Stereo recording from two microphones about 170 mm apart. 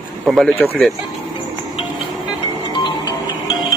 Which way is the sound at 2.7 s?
25° left (ahead or behind).